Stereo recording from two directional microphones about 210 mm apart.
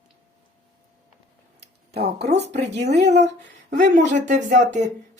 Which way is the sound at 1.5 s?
50° right (ahead or behind).